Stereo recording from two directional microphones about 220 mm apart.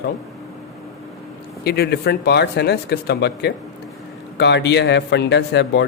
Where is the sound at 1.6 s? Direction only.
45° left (ahead or behind).